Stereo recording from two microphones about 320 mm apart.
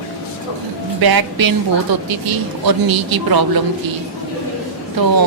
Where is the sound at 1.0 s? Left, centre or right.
Right.